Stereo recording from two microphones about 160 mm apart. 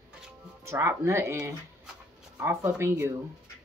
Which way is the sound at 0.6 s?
15° right (ahead or behind).